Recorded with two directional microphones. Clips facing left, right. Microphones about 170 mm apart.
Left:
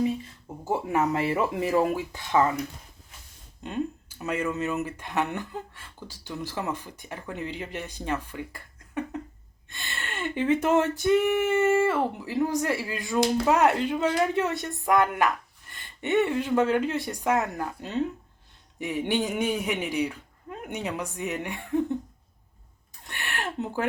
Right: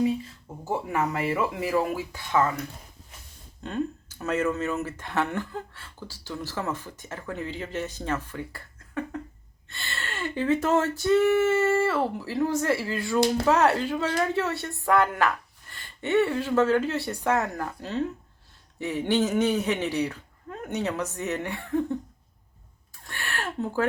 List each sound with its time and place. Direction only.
1.3 s speech: 25° left (ahead or behind)
3.6 s speech: 15° left (ahead or behind)
23.0 s a sound: 20° left (ahead or behind)